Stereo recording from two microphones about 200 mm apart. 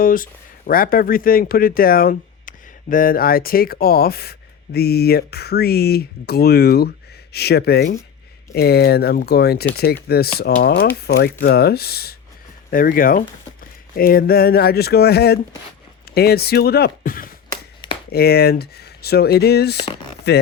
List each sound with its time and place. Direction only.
0.0 s speech: 45° left (ahead or behind)